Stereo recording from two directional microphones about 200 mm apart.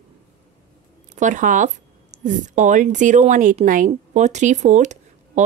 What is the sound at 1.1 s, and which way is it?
A woman's voice, 40° right (ahead or behind).